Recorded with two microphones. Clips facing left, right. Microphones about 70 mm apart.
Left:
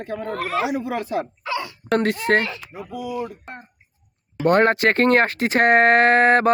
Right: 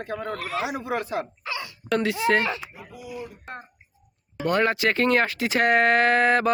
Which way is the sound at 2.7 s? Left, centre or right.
Left.